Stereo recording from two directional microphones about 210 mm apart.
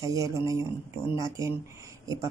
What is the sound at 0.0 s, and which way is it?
Speech, 15° right (ahead or behind).